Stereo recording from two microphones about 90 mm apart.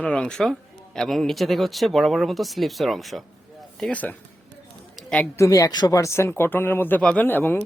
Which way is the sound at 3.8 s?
15° left (ahead or behind).